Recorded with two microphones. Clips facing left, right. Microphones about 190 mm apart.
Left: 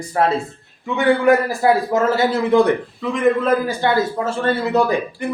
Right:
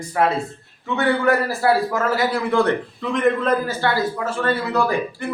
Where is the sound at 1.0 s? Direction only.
15° left (ahead or behind).